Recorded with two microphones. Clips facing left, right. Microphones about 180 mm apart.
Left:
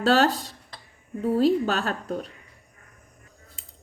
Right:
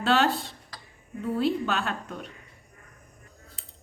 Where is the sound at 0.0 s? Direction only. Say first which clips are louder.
Left 3 dB; 40° left (ahead or behind).